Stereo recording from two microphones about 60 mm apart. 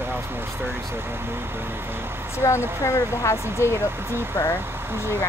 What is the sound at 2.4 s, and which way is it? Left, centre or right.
Speech, left.